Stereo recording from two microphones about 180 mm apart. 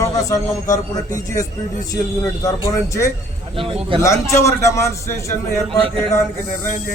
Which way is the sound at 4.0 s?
15° left (ahead or behind).